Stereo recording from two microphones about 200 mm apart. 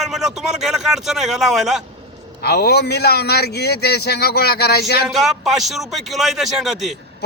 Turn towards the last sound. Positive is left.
turn(degrees=0)  # may be behind; listen again after turning